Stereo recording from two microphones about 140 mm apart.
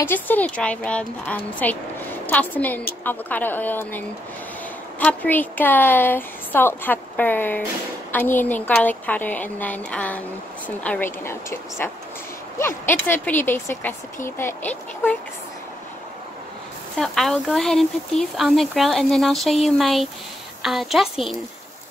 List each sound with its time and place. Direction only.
0.0 s a woman's voice: 15° left (ahead or behind)
16.9 s speech: centre (ahead or behind)